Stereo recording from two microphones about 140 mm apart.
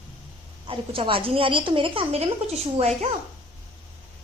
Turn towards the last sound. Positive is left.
turn(degrees=-50)  # may be behind; listen again after turning